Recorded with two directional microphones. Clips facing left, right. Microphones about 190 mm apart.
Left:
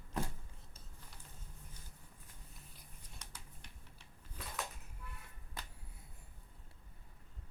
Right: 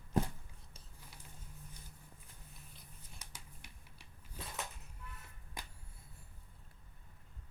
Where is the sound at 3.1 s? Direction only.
10° right (ahead or behind).